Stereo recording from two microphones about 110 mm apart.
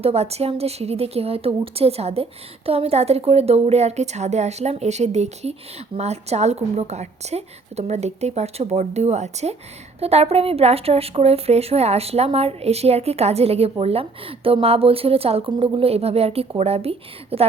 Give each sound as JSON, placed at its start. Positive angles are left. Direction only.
{"t": 0.0, "sound": "a woman's voice", "side_deg": -70}
{"t": 10.0, "sound": "speech", "side_deg": -70}